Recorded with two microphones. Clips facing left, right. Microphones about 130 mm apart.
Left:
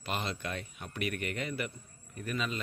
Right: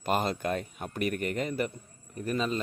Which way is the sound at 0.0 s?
45° right (ahead or behind).